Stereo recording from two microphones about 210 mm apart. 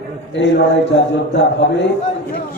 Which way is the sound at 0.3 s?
55° left (ahead or behind).